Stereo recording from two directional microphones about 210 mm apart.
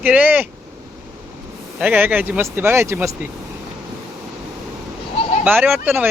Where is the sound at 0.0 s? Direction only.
10° right (ahead or behind).